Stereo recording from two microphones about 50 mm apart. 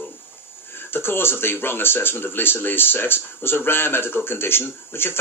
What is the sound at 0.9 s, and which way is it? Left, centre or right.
Speech, left.